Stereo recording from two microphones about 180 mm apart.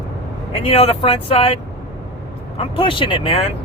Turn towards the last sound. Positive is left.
turn(degrees=35)  # may be behind; listen again after turning